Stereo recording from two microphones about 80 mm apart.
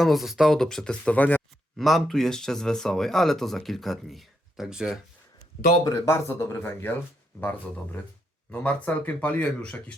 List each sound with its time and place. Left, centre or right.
0.0 s speech: centre
1.7 s speech: centre
5.8 s speech: left
6.6 s speech: left
8.4 s speech: centre